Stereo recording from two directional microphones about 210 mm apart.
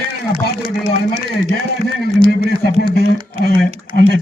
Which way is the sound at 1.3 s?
50° left (ahead or behind).